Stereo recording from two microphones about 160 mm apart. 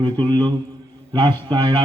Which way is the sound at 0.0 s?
30° right (ahead or behind).